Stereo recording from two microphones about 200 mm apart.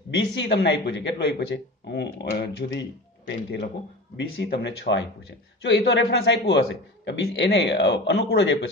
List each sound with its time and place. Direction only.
0.1 s a man's voice: 55° left (ahead or behind)